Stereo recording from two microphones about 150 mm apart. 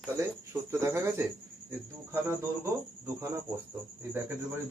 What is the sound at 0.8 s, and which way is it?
Speech, 15° right (ahead or behind).